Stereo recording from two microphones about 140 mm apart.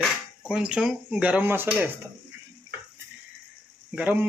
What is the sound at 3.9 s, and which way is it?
Speech, 10° right (ahead or behind).